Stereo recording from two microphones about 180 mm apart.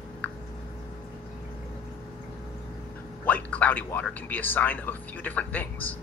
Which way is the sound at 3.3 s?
10° left (ahead or behind).